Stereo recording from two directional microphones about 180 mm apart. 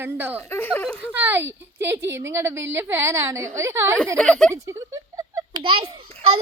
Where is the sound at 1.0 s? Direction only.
10° right (ahead or behind).